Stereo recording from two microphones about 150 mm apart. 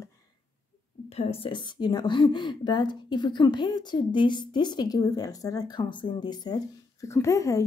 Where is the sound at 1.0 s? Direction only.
45° left (ahead or behind).